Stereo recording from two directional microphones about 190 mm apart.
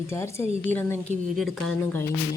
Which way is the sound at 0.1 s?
15° left (ahead or behind).